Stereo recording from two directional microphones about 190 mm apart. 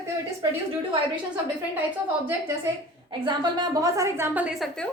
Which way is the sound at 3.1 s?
25° right (ahead or behind).